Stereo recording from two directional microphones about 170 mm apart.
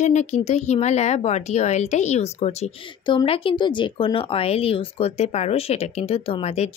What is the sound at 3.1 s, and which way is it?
Speech, 30° left (ahead or behind).